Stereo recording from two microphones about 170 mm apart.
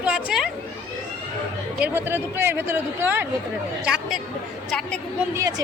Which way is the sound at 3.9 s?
Centre (ahead or behind).